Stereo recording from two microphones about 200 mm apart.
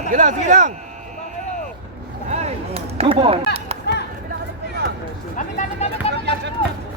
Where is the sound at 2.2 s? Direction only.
30° right (ahead or behind).